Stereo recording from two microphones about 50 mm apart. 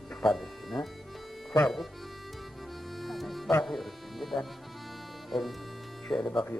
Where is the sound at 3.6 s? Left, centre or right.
Centre.